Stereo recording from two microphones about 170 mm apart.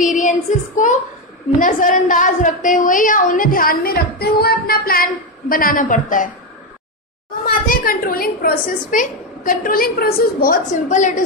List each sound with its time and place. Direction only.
0.0 s a sound: 50° left (ahead or behind)
1.6 s a woman's voice: 50° left (ahead or behind)
7.4 s a woman's voice: 55° left (ahead or behind)